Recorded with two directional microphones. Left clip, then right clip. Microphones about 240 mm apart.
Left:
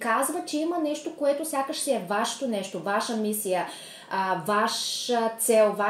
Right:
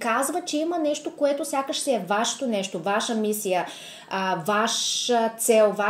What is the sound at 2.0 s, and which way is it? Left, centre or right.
Speech, right.